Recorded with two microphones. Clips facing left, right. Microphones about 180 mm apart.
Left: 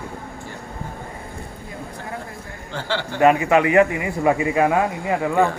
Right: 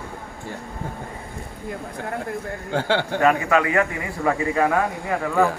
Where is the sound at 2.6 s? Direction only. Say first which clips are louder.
Right 4 dB; 50° right (ahead or behind).